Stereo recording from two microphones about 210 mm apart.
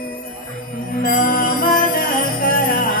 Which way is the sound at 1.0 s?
40° left (ahead or behind).